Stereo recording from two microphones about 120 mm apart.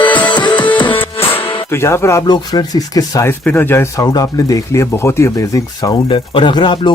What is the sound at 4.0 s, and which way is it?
Speech, 30° left (ahead or behind).